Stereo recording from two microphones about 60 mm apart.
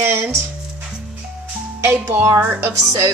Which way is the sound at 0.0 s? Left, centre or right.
Right.